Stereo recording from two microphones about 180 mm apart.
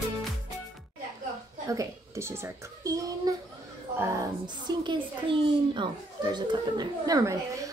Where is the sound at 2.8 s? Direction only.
20° right (ahead or behind).